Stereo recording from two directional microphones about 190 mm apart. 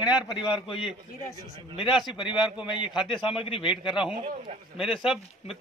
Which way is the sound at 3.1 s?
25° left (ahead or behind).